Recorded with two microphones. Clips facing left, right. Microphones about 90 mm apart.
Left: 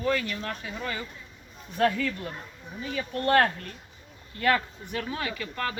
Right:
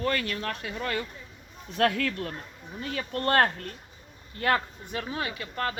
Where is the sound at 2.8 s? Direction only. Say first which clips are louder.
Left 1 dB; 55° right (ahead or behind).